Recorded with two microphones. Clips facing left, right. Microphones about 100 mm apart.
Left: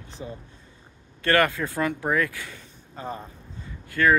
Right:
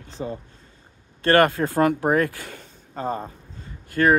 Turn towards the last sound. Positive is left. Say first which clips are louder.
# right 2 dB
turn(degrees=-35)  # may be behind; listen again after turning